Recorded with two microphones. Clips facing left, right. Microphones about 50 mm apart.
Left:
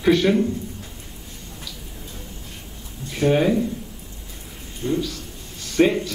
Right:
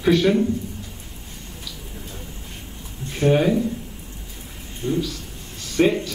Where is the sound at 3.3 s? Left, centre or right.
Centre.